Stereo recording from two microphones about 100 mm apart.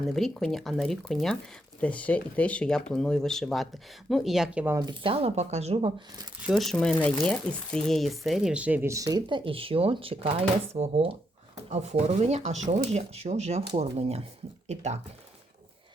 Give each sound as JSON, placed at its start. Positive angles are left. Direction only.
{"t": 0.0, "sound": "speech", "side_deg": 5}
{"t": 5.0, "sound": "speech", "side_deg": -75}
{"t": 6.4, "sound": "speech", "side_deg": 0}
{"t": 7.0, "sound": "speech", "side_deg": 10}
{"t": 8.9, "sound": "speech", "side_deg": -35}
{"t": 9.3, "sound": "speech", "side_deg": -60}
{"t": 10.8, "sound": "speech", "side_deg": -90}